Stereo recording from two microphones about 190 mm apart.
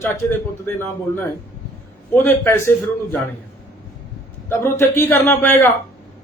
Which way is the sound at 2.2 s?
10° left (ahead or behind).